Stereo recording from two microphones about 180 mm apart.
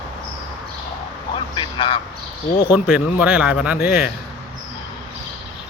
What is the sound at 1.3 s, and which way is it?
Vehicle, 25° left (ahead or behind).